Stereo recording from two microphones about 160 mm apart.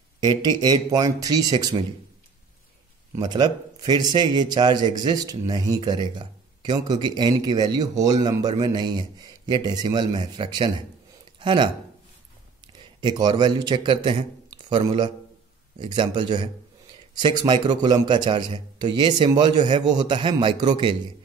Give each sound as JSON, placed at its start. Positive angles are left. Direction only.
{"t": 0.2, "sound": "a man's voice", "side_deg": -25}
{"t": 3.2, "sound": "a man's voice", "side_deg": -25}
{"t": 13.0, "sound": "a man's voice", "side_deg": -25}